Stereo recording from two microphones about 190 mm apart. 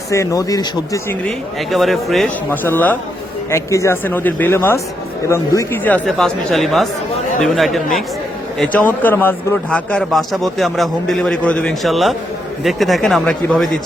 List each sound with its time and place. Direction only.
0.1 s speech: 15° left (ahead or behind)
1.7 s speech: centre (ahead or behind)